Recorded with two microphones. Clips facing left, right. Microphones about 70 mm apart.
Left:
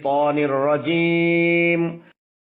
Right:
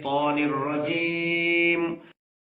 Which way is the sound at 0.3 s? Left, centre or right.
Left.